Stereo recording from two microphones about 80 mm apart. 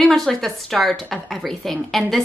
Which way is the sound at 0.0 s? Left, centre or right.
Centre.